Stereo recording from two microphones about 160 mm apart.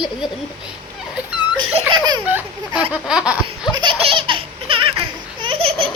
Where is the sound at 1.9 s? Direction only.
25° right (ahead or behind).